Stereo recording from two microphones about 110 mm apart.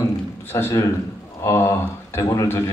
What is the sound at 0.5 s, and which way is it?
A man's voice, 20° left (ahead or behind).